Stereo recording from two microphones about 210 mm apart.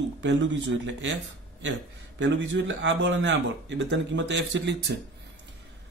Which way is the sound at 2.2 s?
60° right (ahead or behind).